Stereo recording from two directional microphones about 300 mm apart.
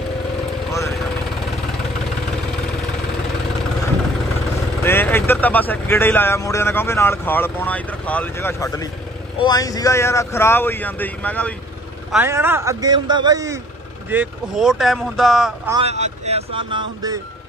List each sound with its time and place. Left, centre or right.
0.7 s vehicle: centre
4.8 s speech: centre
12.1 s speech: centre
15.7 s speech: right